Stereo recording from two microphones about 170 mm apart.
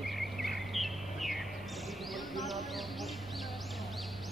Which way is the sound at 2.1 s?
Centre (ahead or behind).